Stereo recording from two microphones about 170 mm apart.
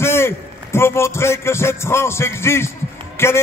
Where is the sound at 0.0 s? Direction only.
15° left (ahead or behind).